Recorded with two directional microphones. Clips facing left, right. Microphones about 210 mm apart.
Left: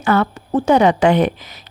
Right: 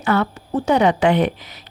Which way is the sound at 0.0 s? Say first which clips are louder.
Left 2 dB; 45° left (ahead or behind).